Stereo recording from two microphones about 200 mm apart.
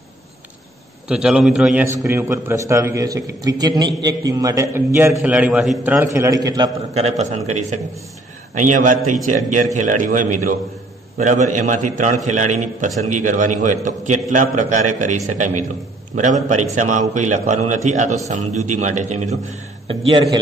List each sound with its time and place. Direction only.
1.0 s a man's voice: 5° right (ahead or behind)
6.1 s a man's voice: 15° right (ahead or behind)
6.9 s a man's voice: 30° right (ahead or behind)
20.1 s a man's voice: 25° right (ahead or behind)